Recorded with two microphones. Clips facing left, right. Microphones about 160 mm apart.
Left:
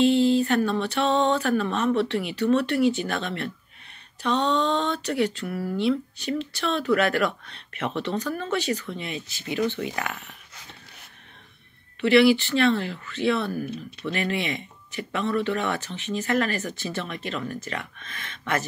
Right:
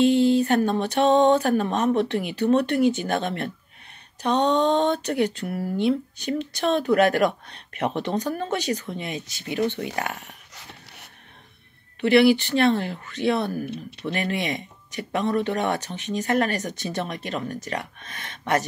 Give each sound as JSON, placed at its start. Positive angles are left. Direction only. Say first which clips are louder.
{"t": 0.4, "sound": "speech", "louder": "right 2 dB", "side_deg": -40}
{"t": 12.0, "sound": "speech", "louder": "right 1 dB", "side_deg": -45}